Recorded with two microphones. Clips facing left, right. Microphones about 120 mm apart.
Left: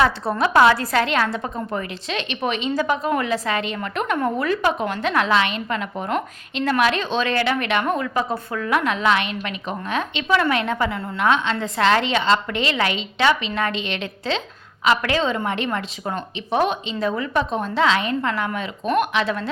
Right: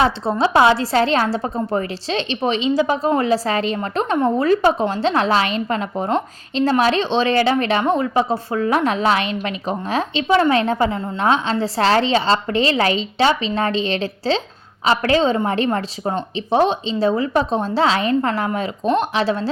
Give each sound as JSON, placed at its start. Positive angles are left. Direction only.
{"t": 0.0, "sound": "a woman's voice", "side_deg": -25}